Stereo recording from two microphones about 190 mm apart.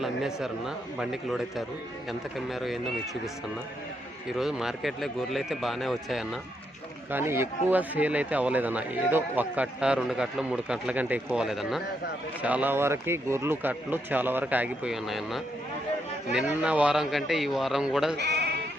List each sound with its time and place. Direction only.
0.0 s speech: centre (ahead or behind)
4.3 s speech: centre (ahead or behind)
7.1 s speech: 10° right (ahead or behind)
18.2 s speech: 60° right (ahead or behind)